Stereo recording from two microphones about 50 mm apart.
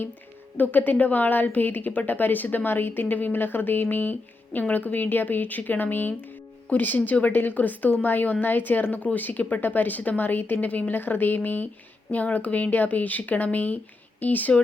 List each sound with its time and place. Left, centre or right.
0.5 s a woman's voice: left